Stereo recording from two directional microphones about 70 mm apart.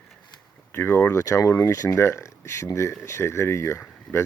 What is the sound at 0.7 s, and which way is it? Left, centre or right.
Speech, left.